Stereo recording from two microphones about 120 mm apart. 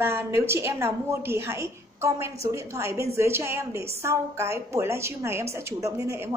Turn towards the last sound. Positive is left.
turn(degrees=-20)  # may be behind; listen again after turning